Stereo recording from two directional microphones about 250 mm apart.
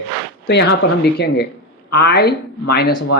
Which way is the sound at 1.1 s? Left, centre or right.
Left.